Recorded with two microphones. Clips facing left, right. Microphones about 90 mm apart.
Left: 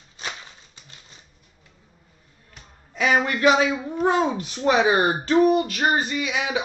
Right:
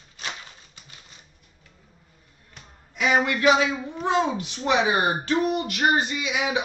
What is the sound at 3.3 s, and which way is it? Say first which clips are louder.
A man's voice: left 1 dB; 30° left (ahead or behind).